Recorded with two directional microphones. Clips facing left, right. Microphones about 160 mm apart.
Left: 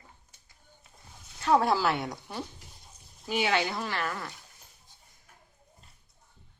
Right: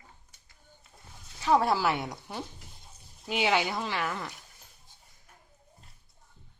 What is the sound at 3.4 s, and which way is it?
Speech, 15° right (ahead or behind).